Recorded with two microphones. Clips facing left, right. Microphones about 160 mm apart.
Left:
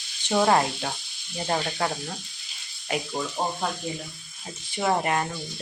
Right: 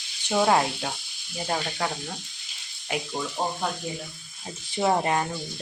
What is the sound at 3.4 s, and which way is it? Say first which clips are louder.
Speech: even; 10° left (ahead or behind).